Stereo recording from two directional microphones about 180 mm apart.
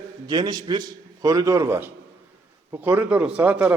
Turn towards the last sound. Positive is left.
turn(degrees=-10)  # may be behind; listen again after turning